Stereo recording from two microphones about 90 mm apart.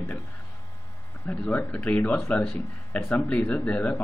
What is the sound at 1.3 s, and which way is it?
Speech, 15° left (ahead or behind).